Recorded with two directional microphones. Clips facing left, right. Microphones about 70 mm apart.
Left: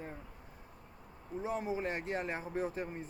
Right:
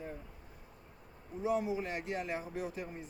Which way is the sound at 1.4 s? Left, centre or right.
Left.